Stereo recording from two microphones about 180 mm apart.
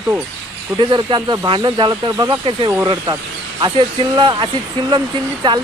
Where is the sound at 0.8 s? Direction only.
25° right (ahead or behind).